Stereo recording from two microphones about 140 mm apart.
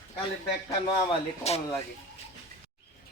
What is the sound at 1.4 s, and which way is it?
Speech, 50° left (ahead or behind).